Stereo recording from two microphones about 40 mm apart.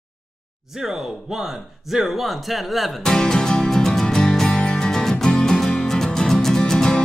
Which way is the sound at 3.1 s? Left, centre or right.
Centre.